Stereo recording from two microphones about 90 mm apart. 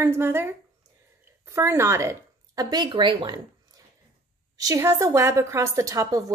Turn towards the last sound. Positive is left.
turn(degrees=-40)  # may be behind; listen again after turning